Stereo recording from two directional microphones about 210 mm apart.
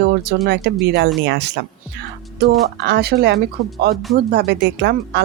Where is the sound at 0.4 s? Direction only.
55° right (ahead or behind).